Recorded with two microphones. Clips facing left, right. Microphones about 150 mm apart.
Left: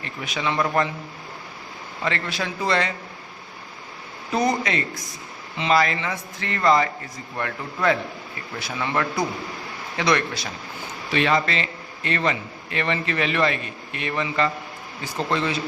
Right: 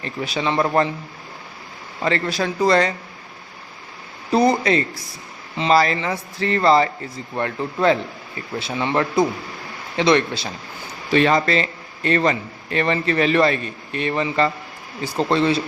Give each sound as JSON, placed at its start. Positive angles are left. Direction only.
{"t": 0.0, "sound": "a man's voice", "side_deg": -35}
{"t": 2.0, "sound": "a man's voice", "side_deg": -35}
{"t": 4.3, "sound": "a man's voice", "side_deg": -35}
{"t": 11.1, "sound": "a man's voice", "side_deg": -40}